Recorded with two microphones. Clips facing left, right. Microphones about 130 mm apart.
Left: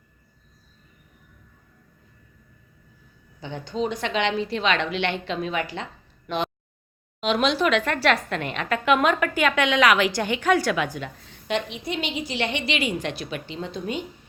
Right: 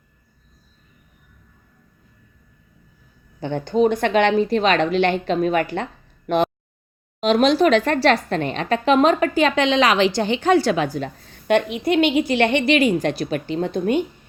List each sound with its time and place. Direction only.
3.4 s a woman's voice: 55° right (ahead or behind); by 11.3 s 35° right (ahead or behind)
11.4 s a woman's voice: 60° right (ahead or behind)